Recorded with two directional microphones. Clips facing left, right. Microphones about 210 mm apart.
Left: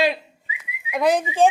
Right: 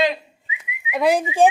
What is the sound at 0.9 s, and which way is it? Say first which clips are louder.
Speech: right 1 dB; 5° right (ahead or behind).